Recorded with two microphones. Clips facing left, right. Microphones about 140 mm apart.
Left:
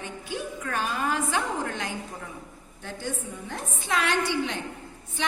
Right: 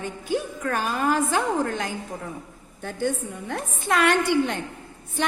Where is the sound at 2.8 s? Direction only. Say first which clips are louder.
Right 7 dB; 55° right (ahead or behind).